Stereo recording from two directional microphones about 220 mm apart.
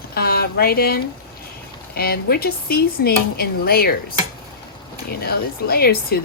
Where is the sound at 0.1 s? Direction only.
45° left (ahead or behind).